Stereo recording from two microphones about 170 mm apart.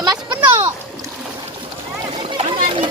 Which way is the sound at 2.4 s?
30° right (ahead or behind).